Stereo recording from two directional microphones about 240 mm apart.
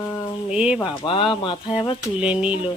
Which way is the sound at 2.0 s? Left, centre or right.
Centre.